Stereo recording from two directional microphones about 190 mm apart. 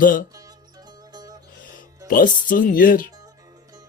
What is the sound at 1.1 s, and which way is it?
Music, 20° right (ahead or behind).